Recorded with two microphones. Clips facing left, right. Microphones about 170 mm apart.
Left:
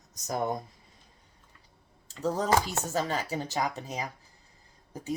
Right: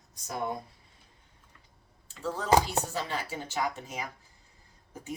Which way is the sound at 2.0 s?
40° left (ahead or behind).